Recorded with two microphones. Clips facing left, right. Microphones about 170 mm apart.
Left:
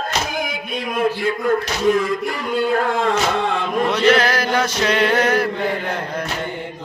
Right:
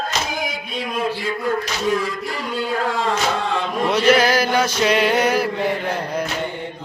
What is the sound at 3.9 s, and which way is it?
Male singing, 5° right (ahead or behind).